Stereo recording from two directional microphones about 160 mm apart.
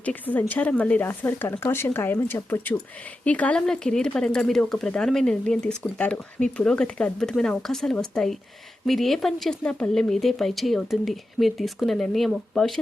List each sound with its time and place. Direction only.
0.0 s speech: 10° left (ahead or behind)